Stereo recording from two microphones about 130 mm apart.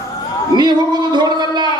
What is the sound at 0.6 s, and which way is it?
A man's voice, 35° right (ahead or behind).